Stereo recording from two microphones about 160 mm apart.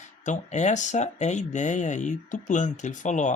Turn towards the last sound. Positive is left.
turn(degrees=50)  # may be behind; listen again after turning